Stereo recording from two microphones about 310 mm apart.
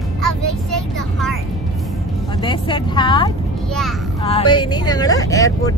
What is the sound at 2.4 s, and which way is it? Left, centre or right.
Speech, centre.